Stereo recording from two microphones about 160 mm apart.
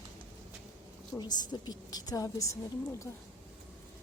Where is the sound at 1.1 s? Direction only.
25° left (ahead or behind).